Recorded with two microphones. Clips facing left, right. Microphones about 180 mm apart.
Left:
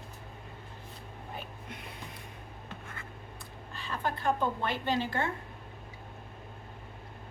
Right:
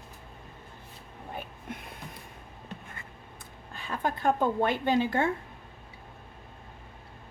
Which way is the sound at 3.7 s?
50° right (ahead or behind).